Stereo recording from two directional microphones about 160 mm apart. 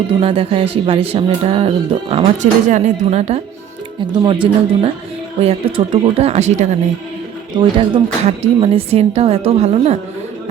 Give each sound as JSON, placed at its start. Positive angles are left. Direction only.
{"t": 0.1, "sound": "speech", "side_deg": -35}
{"t": 4.0, "sound": "speech", "side_deg": -30}
{"t": 7.5, "sound": "speech", "side_deg": -30}